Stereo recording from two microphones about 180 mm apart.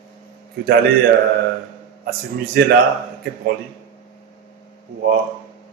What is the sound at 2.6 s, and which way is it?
Speech, 60° right (ahead or behind).